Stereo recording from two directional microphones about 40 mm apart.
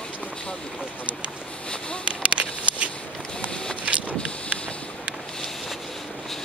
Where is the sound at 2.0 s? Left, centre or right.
Right.